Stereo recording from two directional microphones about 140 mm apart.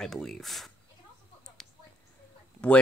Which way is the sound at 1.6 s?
5° left (ahead or behind).